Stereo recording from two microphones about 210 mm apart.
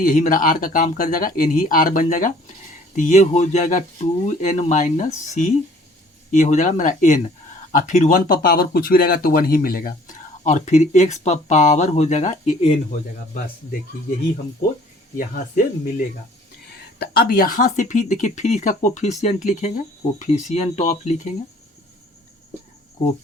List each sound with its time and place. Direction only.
0.0 s speech: 40° left (ahead or behind)
15.1 s speech: 40° left (ahead or behind)
17.0 s speech: 45° left (ahead or behind)